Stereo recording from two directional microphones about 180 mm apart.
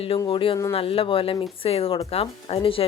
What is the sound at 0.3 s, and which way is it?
Speech, 30° left (ahead or behind).